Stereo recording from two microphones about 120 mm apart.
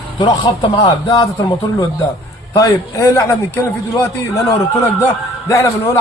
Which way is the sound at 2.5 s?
30° left (ahead or behind).